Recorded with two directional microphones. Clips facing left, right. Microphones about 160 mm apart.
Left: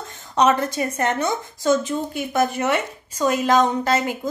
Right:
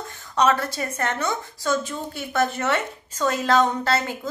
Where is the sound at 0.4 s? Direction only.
20° left (ahead or behind).